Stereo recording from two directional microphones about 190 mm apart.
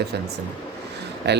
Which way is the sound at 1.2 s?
65° right (ahead or behind).